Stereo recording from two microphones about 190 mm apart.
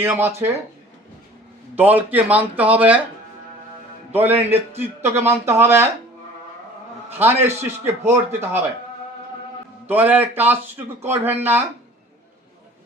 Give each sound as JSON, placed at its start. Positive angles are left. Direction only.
{"t": 0.0, "sound": "a man's voice", "side_deg": -10}
{"t": 1.7, "sound": "a man's voice", "side_deg": -10}
{"t": 4.1, "sound": "a man's voice", "side_deg": -10}
{"t": 7.2, "sound": "a man's voice", "side_deg": -10}
{"t": 9.8, "sound": "a man's voice", "side_deg": -10}